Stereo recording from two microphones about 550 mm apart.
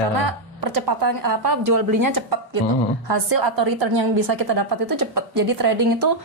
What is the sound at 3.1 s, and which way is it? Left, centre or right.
A woman's voice, right.